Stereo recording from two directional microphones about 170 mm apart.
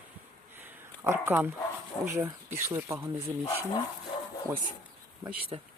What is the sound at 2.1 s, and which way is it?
Speech, 15° right (ahead or behind).